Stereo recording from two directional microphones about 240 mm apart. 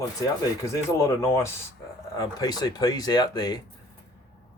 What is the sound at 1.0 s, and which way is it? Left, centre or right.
Speech, centre.